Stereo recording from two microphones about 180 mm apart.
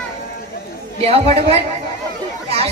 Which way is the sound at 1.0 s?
35° right (ahead or behind).